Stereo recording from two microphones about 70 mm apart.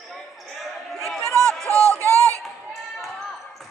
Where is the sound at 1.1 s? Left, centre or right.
Centre.